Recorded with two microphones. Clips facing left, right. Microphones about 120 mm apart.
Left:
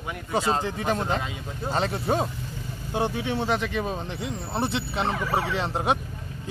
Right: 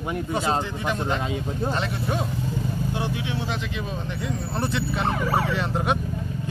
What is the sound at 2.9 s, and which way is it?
Speech, 50° left (ahead or behind).